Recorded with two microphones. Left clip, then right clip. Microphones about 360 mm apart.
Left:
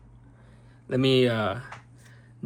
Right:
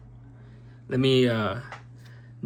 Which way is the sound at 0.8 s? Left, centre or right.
Centre.